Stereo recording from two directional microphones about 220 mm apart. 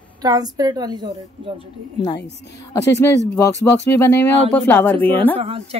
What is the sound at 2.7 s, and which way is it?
A woman's voice, 15° left (ahead or behind).